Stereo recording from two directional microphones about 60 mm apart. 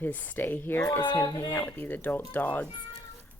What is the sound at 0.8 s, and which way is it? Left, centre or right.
Speech, left.